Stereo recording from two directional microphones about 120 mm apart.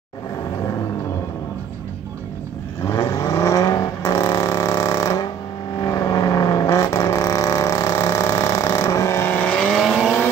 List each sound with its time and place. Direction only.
2.8 s vehicle: 20° left (ahead or behind); by 10.1 s 5° right (ahead or behind)